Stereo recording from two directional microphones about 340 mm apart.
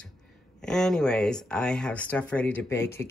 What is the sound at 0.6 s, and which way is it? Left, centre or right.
Speech, centre.